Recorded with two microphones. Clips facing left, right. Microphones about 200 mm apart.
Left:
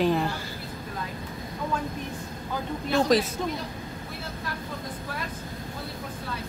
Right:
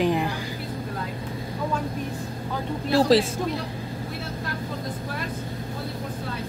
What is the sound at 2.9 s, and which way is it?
Speech, 30° right (ahead or behind).